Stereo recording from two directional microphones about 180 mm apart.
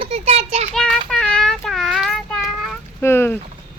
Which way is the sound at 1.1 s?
5° left (ahead or behind).